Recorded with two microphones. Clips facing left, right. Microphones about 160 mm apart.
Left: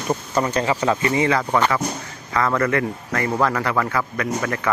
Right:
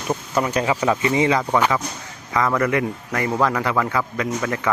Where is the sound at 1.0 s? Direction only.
20° right (ahead or behind).